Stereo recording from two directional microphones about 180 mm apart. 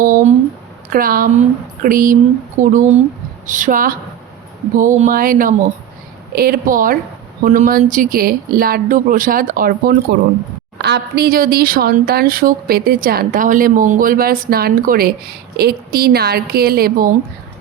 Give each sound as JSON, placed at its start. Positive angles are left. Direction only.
{"t": 0.0, "sound": "speech", "side_deg": -50}
{"t": 10.8, "sound": "speech", "side_deg": -70}